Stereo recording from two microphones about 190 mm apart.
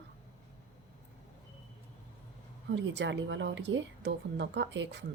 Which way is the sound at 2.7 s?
70° right (ahead or behind).